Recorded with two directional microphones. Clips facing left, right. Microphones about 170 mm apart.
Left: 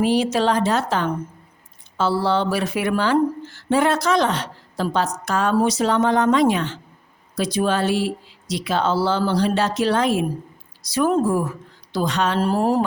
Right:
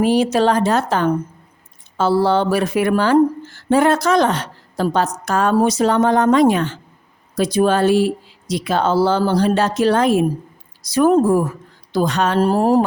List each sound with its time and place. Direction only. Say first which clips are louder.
0.0 s speech: right 4 dB; 50° right (ahead or behind)